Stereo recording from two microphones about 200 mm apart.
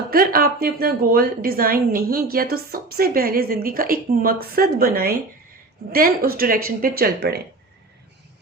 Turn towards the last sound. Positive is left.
turn(degrees=-55)  # may be behind; listen again after turning